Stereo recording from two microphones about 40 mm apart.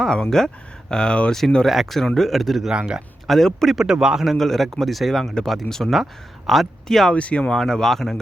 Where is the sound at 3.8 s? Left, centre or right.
Centre.